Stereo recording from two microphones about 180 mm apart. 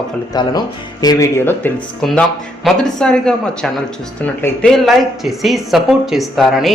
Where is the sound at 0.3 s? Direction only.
20° left (ahead or behind).